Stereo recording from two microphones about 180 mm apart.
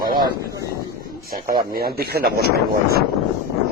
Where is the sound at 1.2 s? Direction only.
50° right (ahead or behind).